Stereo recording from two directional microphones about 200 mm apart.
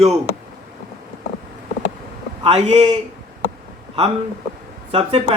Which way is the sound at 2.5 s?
30° right (ahead or behind).